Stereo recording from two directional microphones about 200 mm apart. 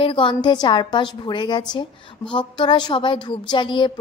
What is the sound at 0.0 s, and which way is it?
A woman's voice, 25° left (ahead or behind).